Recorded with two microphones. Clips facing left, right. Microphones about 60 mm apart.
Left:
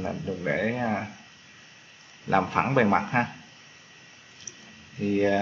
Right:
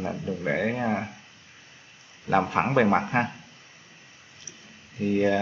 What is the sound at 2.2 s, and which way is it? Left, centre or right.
Speech, centre.